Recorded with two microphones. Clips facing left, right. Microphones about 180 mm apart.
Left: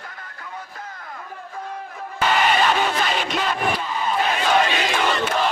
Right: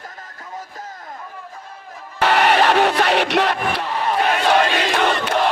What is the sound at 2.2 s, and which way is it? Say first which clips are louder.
Music: right 4 dB; 70° right (ahead or behind).